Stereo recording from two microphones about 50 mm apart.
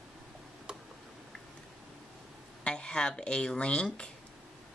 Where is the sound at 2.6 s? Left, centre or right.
Centre.